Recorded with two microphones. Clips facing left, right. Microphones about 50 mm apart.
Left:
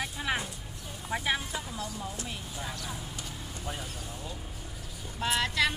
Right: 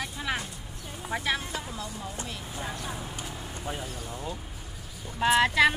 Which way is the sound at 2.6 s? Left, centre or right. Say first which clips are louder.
Right 5 dB; right.